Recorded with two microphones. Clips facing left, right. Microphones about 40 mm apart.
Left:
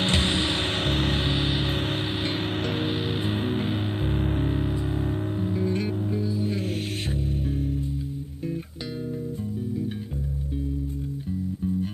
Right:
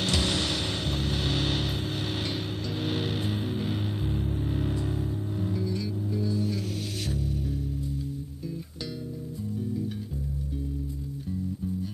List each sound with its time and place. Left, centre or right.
0.0 s music: left
0.8 s music: left
1.2 s music: left
2.8 s music: left
3.3 s music: left
4.5 s music: left